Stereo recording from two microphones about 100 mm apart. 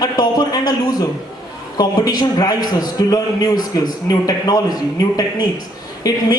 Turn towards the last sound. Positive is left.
turn(degrees=40)  # may be behind; listen again after turning